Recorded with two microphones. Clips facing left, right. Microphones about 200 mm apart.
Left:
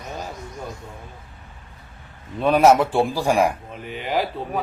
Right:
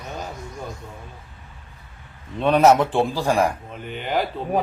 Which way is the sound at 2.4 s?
5° left (ahead or behind).